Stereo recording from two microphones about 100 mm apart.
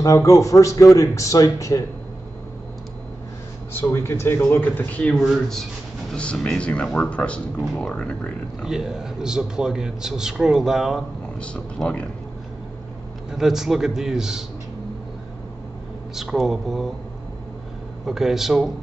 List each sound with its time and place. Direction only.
0.0 s a man's voice: 35° left (ahead or behind)
3.7 s speech: 25° left (ahead or behind)
6.1 s speech: 10° left (ahead or behind)
8.6 s a man's voice: 5° right (ahead or behind)
11.3 s speech: 10° left (ahead or behind)
13.3 s a man's voice: 5° right (ahead or behind)
16.2 s a man's voice: 5° right (ahead or behind)
18.0 s a man's voice: 5° right (ahead or behind)